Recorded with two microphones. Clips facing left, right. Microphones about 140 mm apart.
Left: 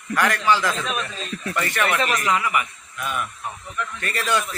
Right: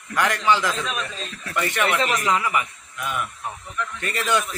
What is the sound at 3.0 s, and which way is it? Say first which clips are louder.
Speech: even; 15° right (ahead or behind).